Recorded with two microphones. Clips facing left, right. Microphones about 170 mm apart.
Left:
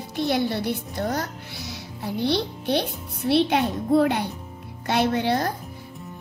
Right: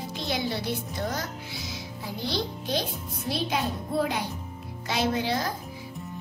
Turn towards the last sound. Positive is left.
turn(degrees=60)  # may be behind; listen again after turning